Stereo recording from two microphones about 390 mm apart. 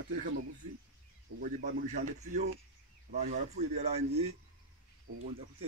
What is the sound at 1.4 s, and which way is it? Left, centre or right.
A man's voice, centre.